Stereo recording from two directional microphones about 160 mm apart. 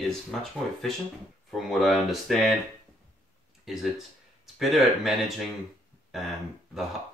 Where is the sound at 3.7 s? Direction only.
Centre (ahead or behind).